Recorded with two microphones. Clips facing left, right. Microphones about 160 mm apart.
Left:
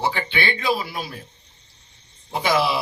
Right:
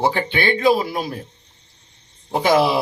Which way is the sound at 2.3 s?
45° right (ahead or behind).